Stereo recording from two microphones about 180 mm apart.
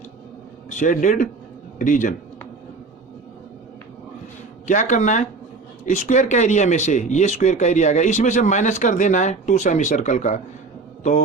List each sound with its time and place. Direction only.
0.8 s speech: 45° left (ahead or behind)
4.6 s speech: 40° left (ahead or behind)